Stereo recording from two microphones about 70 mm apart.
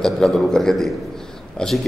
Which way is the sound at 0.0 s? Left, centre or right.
Centre.